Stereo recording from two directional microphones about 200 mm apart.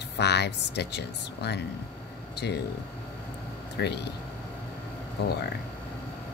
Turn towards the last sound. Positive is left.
turn(degrees=55)  # may be behind; listen again after turning